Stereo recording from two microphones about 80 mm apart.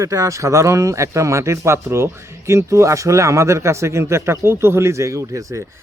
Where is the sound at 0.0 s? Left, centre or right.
Right.